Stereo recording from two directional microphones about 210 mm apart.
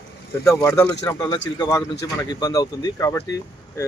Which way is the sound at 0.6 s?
10° left (ahead or behind).